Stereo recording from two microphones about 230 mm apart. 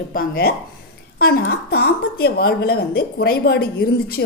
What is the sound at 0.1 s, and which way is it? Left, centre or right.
A woman's voice, left.